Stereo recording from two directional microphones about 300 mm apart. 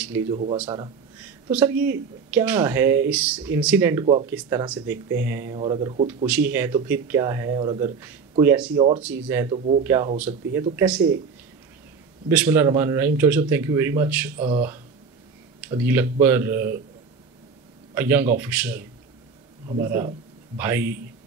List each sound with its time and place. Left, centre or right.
0.3 s speech: centre
1.5 s speech: centre
6.2 s speech: centre
12.3 s speech: centre
15.7 s speech: centre
17.9 s speech: centre
19.8 s speech: centre